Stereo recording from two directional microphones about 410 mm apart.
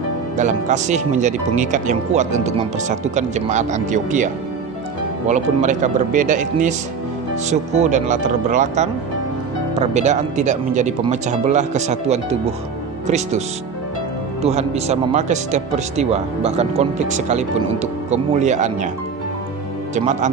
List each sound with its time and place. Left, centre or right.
0.4 s speech: centre
5.3 s speech: centre
14.4 s speech: centre
19.9 s speech: centre